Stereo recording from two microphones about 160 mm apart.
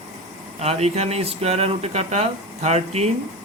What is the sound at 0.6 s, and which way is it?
Speech, 40° right (ahead or behind).